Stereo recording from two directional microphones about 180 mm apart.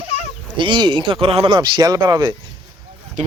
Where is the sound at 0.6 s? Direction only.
25° right (ahead or behind).